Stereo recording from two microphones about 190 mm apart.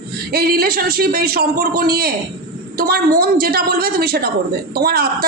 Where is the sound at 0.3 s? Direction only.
55° right (ahead or behind).